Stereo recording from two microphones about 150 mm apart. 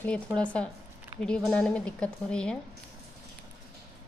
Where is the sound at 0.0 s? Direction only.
5° left (ahead or behind).